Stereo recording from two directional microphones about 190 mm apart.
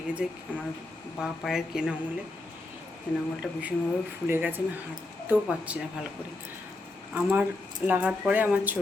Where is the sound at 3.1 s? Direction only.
5° right (ahead or behind).